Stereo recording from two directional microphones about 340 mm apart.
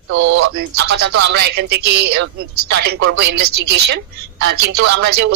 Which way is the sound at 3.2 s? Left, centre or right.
Right.